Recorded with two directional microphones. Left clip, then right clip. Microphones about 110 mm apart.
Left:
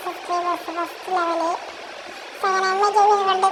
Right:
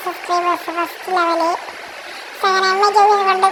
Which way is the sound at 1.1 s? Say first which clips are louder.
Right 5 dB; 60° right (ahead or behind).